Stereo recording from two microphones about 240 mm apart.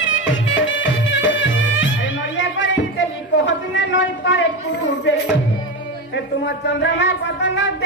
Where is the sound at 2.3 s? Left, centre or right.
Left.